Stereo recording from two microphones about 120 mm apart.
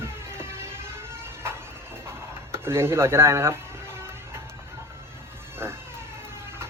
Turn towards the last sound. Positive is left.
turn(degrees=-20)  # may be behind; listen again after turning